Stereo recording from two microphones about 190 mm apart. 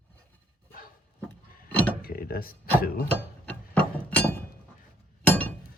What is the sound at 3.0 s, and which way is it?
Chink, 5° left (ahead or behind).